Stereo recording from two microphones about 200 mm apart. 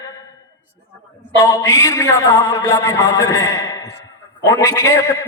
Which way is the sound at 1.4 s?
15° left (ahead or behind).